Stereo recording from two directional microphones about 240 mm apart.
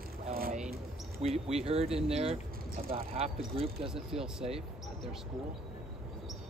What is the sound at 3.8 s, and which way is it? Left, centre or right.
Speech, centre.